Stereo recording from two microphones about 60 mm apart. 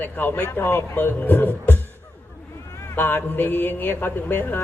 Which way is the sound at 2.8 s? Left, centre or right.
Left.